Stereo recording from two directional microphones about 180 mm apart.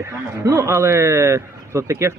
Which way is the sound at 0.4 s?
15° right (ahead or behind).